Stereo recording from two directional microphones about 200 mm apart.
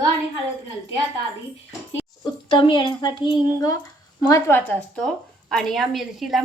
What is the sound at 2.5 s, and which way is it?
A woman's voice, 25° left (ahead or behind).